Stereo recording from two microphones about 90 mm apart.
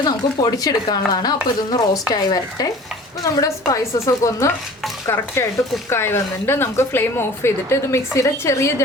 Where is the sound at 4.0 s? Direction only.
30° left (ahead or behind).